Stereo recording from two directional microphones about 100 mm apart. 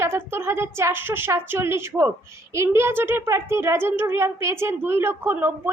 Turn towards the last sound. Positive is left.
turn(degrees=-20)  # may be behind; listen again after turning